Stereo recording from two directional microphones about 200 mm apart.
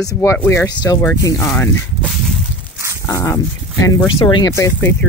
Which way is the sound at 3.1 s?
15° left (ahead or behind).